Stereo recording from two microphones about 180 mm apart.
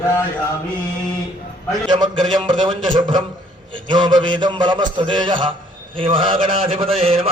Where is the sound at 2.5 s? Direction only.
25° right (ahead or behind).